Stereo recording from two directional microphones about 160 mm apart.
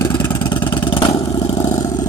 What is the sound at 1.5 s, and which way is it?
Vehicle, 20° left (ahead or behind).